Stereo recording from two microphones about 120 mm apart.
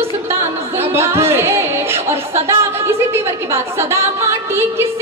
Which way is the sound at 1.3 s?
20° right (ahead or behind).